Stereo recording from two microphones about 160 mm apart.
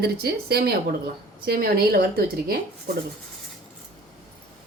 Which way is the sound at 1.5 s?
70° right (ahead or behind).